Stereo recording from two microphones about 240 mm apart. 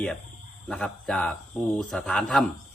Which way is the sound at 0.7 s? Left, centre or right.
Centre.